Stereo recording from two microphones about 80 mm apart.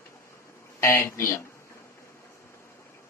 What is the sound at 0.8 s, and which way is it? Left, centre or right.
Speech, left.